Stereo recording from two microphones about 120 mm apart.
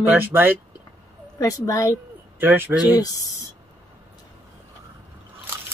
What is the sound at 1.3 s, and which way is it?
Speech, 30° left (ahead or behind).